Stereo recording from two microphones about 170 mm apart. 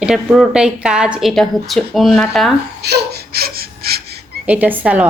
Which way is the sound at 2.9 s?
70° right (ahead or behind).